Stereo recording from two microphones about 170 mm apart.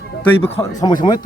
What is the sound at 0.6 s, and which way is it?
Speech, 20° left (ahead or behind).